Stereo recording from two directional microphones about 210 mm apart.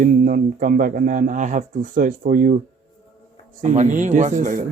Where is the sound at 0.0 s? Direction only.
40° right (ahead or behind).